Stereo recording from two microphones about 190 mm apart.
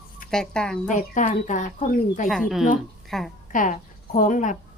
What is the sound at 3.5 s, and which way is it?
Speech, 45° left (ahead or behind).